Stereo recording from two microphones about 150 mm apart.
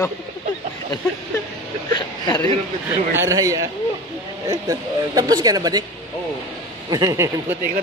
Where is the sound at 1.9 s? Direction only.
30° left (ahead or behind).